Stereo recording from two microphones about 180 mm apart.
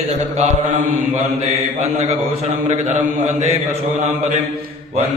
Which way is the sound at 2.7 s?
40° right (ahead or behind).